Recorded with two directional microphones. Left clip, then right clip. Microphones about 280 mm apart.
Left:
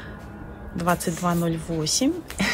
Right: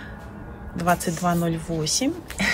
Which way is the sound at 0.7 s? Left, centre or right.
Centre.